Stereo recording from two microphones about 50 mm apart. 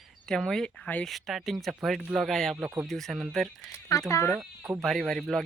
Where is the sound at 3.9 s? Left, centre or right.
Left.